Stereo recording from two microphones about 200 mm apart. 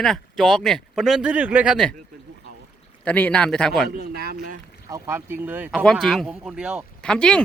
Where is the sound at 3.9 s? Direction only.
50° right (ahead or behind).